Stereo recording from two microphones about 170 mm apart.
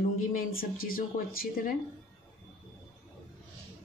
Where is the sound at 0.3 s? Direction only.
55° left (ahead or behind).